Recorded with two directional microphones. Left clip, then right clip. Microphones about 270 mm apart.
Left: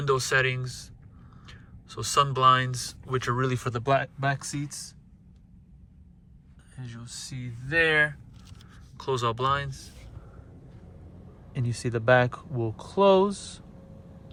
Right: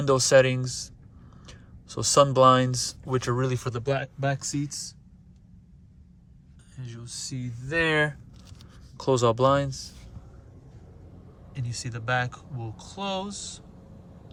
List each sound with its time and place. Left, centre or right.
0.0 s speech: centre
7.0 s speech: centre
7.7 s speech: right
11.5 s speech: centre